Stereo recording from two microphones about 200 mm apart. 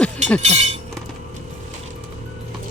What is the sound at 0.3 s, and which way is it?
Speech, 35° right (ahead or behind).